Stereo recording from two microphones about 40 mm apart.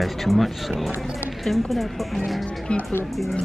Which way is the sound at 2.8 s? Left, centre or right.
Left.